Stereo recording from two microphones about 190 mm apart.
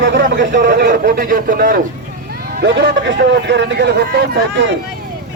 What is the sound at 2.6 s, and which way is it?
A man's voice, 65° right (ahead or behind).